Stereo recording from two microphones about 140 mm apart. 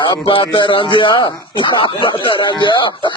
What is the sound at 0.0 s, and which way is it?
A man's voice, 35° left (ahead or behind).